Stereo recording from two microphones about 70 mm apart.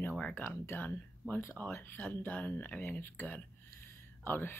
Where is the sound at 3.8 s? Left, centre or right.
Left.